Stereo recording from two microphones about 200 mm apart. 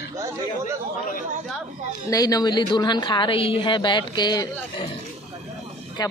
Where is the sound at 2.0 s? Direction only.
20° left (ahead or behind).